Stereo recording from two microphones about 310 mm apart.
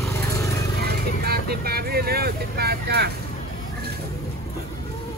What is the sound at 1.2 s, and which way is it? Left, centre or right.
Vehicle, right.